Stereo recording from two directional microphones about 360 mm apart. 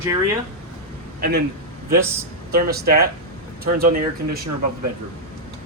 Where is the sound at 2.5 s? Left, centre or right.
Right.